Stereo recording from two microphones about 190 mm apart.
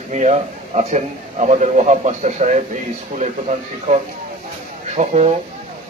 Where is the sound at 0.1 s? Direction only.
35° right (ahead or behind).